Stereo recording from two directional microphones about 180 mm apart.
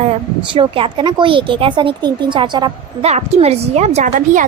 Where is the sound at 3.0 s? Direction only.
35° right (ahead or behind).